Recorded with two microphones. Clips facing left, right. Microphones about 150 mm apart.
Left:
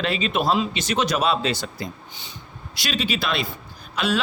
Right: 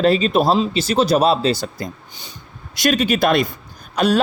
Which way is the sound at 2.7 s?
50° right (ahead or behind).